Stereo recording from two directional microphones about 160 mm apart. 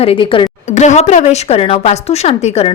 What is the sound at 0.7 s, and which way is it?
Speech, 45° left (ahead or behind).